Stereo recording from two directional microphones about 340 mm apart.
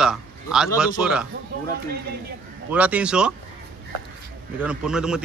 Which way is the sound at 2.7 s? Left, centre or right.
Centre.